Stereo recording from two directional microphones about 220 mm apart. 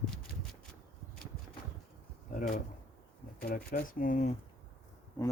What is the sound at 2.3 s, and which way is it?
Speech, 35° left (ahead or behind).